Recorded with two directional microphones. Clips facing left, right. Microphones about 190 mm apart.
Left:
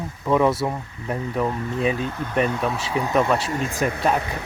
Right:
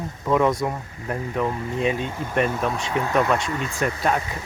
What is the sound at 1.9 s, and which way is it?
Speech, 30° right (ahead or behind).